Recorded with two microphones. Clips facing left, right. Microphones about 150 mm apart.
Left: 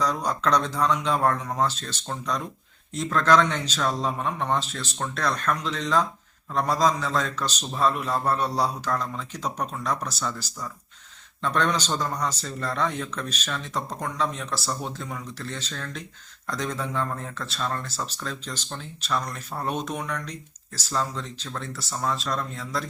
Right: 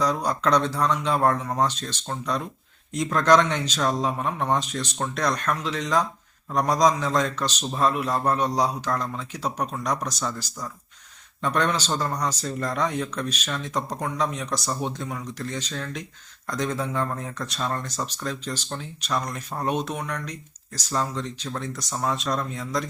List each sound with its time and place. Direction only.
0.0 s speech: 10° right (ahead or behind)
4.5 s speech: 15° right (ahead or behind)
17.3 s speech: 15° right (ahead or behind)